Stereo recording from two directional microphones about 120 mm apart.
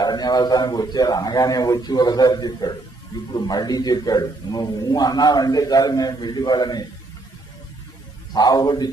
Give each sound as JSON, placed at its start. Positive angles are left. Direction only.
{"t": 0.0, "sound": "a man's voice", "side_deg": 35}
{"t": 8.3, "sound": "a man's voice", "side_deg": 35}